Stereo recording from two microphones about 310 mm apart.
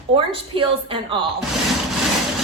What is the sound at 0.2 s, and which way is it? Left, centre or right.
A woman's voice, centre.